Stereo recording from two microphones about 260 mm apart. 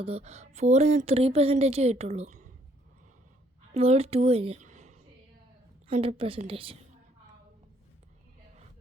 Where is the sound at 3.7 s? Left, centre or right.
Right.